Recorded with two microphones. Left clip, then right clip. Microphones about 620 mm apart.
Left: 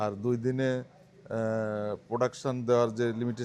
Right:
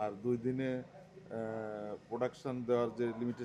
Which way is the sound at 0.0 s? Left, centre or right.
Left.